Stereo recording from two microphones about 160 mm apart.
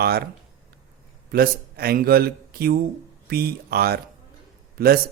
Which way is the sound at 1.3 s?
75° right (ahead or behind).